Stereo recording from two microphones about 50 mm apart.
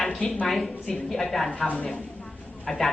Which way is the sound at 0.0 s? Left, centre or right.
Centre.